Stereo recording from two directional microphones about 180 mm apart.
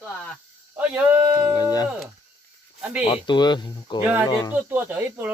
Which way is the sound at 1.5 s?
20° left (ahead or behind).